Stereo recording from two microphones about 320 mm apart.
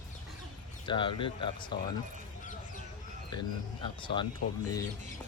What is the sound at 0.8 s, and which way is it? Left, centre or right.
Speech, centre.